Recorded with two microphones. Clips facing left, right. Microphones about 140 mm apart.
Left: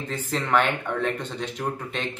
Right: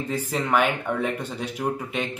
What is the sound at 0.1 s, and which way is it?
Speech, 10° right (ahead or behind).